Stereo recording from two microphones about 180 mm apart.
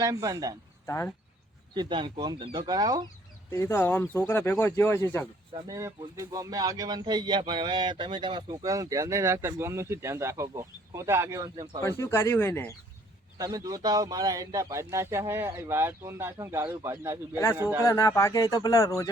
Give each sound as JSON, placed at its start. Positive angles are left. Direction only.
{"t": 0.0, "sound": "speech", "side_deg": -20}
{"t": 0.9, "sound": "speech", "side_deg": 15}
{"t": 1.7, "sound": "speech", "side_deg": -25}
{"t": 3.5, "sound": "speech", "side_deg": 15}
{"t": 5.6, "sound": "speech", "side_deg": -20}
{"t": 11.8, "sound": "speech", "side_deg": 15}
{"t": 13.4, "sound": "speech", "side_deg": -20}
{"t": 17.8, "sound": "speech", "side_deg": 20}